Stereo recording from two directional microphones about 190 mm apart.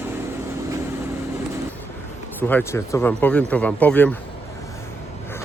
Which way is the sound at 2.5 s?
10° left (ahead or behind).